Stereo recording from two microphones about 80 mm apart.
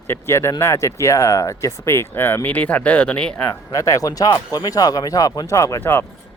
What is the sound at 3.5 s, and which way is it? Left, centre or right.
Speech, left.